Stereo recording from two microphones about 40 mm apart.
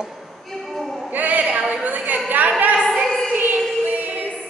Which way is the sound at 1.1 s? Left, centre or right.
Right.